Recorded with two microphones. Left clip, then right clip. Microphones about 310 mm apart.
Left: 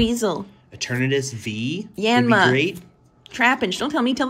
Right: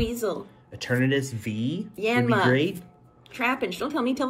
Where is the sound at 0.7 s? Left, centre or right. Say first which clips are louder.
Left 2 dB; centre.